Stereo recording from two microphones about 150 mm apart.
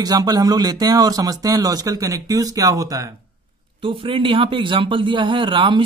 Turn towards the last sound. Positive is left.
turn(degrees=-35)  # may be behind; listen again after turning